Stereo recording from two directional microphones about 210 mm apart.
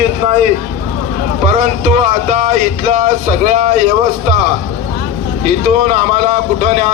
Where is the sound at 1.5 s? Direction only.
35° right (ahead or behind).